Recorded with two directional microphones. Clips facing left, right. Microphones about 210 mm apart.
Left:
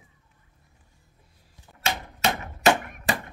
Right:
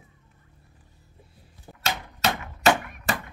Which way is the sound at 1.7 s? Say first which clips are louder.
Right 8 dB; 35° right (ahead or behind).